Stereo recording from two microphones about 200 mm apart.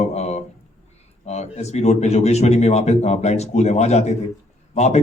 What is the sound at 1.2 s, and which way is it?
Speech, 35° left (ahead or behind).